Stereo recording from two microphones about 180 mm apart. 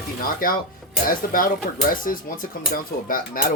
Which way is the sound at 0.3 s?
50° left (ahead or behind).